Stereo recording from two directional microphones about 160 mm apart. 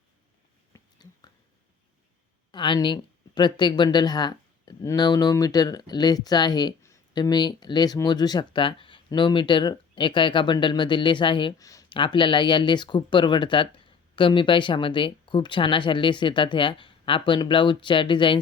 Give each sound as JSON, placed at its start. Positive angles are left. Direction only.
{"t": 0.7, "sound": "whispering", "side_deg": 25}
{"t": 2.5, "sound": "speech", "side_deg": 30}